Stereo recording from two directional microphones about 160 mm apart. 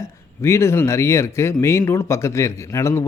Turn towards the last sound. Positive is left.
turn(degrees=15)  # may be behind; listen again after turning